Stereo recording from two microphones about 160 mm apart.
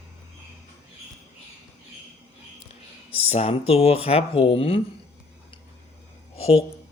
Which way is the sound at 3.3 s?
40° left (ahead or behind).